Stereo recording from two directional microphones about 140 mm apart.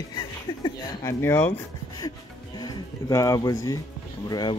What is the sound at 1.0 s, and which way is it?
Speech, 15° left (ahead or behind).